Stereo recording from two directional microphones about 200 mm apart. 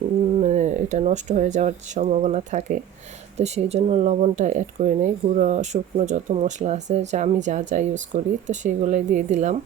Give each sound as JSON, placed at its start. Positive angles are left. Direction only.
{"t": 0.3, "sound": "speech", "side_deg": -35}